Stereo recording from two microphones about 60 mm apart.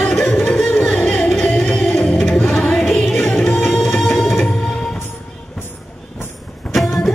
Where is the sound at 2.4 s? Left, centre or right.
Left.